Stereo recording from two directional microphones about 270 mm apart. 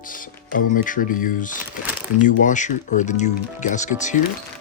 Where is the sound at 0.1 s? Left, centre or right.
Left.